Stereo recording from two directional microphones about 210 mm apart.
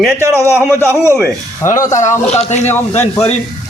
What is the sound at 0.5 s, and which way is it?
Speech, 10° left (ahead or behind).